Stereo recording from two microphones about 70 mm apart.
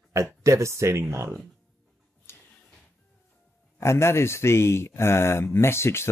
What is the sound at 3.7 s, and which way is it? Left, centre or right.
Speech, left.